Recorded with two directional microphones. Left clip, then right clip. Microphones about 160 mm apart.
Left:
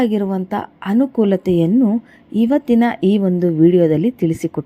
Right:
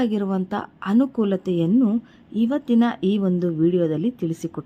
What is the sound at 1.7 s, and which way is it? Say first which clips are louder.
Speech: left 4 dB; 5° left (ahead or behind).